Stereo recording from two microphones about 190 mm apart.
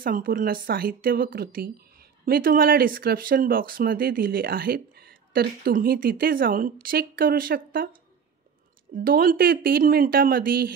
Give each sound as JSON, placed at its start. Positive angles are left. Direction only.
{"t": 0.0, "sound": "speech", "side_deg": -50}
{"t": 8.9, "sound": "speech", "side_deg": -50}